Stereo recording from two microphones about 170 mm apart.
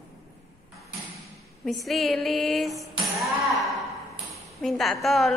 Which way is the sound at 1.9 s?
Centre (ahead or behind).